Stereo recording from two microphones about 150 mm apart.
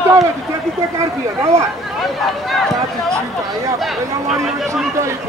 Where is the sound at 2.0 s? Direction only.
Centre (ahead or behind).